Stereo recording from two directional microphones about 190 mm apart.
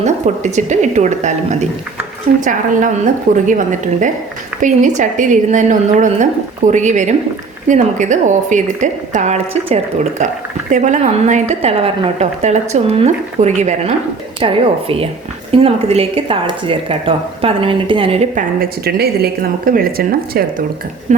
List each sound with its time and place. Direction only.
0.5 s a woman's voice: 40° right (ahead or behind)
18.6 s speech: 55° right (ahead or behind)
21.1 s a woman's voice: 40° right (ahead or behind)